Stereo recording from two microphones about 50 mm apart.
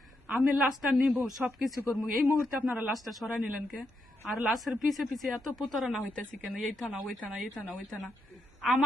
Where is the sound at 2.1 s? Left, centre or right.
Right.